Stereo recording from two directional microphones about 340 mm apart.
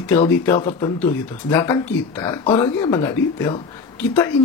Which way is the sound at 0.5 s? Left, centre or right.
Centre.